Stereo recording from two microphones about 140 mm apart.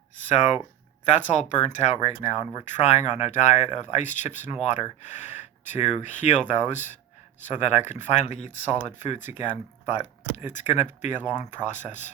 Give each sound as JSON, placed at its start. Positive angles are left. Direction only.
{"t": 0.3, "sound": "speech", "side_deg": 60}